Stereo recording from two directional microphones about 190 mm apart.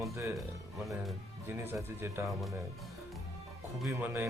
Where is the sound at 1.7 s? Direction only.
15° right (ahead or behind).